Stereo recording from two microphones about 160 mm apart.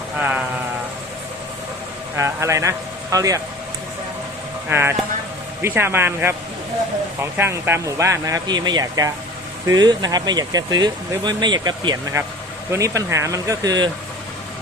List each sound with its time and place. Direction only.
0.2 s speech: 10° right (ahead or behind)
2.1 s speech: 15° right (ahead or behind)
4.7 s speech: 15° right (ahead or behind)